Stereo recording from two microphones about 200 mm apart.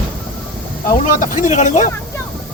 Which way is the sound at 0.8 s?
40° left (ahead or behind).